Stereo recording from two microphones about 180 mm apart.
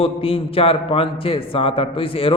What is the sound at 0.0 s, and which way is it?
A man's voice, 30° left (ahead or behind).